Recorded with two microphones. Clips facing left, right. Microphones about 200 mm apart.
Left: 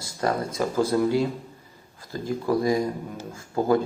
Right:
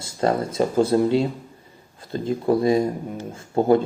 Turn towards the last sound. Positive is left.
turn(degrees=-25)  # may be behind; listen again after turning